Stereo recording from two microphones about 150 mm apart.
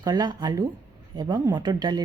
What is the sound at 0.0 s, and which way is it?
A woman's voice, 30° right (ahead or behind).